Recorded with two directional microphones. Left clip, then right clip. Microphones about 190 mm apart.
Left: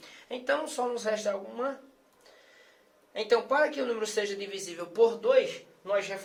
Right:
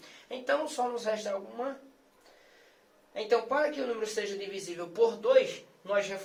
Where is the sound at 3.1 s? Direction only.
50° left (ahead or behind).